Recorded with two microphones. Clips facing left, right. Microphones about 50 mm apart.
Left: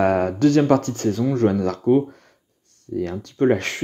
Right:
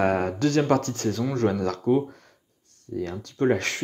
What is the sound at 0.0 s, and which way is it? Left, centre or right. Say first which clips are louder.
Speech: left 5 dB; left.